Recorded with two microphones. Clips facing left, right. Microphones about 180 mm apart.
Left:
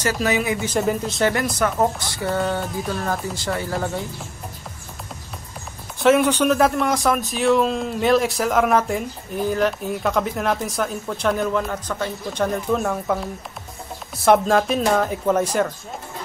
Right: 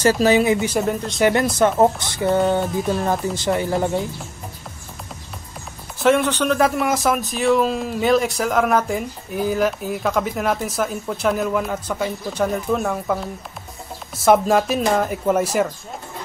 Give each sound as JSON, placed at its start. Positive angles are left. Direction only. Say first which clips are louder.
{"t": 0.0, "sound": "speech", "louder": "right 6 dB", "side_deg": -30}
{"t": 0.7, "sound": "a man's voice", "louder": "even", "side_deg": 0}
{"t": 1.3, "sound": "speech", "louder": "right 5 dB", "side_deg": -25}
{"t": 5.9, "sound": "a man's voice", "louder": "left 1 dB", "side_deg": 5}